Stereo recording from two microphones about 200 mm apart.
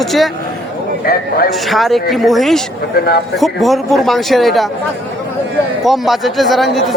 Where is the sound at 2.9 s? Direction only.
50° left (ahead or behind).